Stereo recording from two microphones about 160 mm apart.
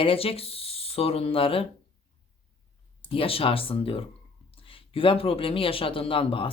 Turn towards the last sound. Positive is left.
turn(degrees=35)  # may be behind; listen again after turning